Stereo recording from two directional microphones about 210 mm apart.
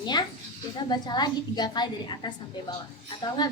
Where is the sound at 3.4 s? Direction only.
20° left (ahead or behind).